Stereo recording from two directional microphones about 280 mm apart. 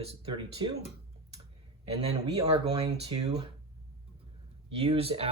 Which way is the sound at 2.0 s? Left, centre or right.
Right.